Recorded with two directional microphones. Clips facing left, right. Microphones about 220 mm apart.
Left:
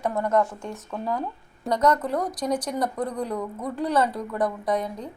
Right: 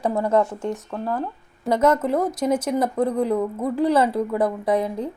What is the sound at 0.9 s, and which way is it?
Speech, 5° right (ahead or behind).